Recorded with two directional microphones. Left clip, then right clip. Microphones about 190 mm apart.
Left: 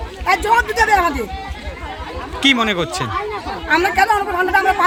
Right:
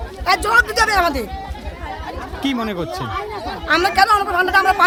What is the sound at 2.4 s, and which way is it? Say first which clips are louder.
Speech: left 8 dB; centre (ahead or behind).